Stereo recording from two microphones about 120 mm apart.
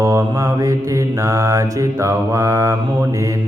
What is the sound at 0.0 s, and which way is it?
Mantra, 25° right (ahead or behind).